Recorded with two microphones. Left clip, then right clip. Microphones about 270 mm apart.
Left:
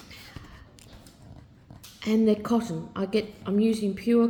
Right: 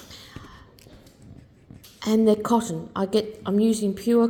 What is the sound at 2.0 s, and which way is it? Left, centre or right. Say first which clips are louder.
A woman's voice: right 4 dB; right.